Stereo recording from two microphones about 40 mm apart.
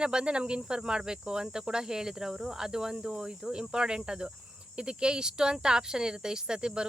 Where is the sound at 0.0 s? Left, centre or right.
Right.